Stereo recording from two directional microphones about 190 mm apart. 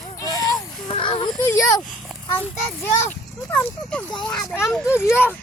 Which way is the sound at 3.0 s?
10° left (ahead or behind).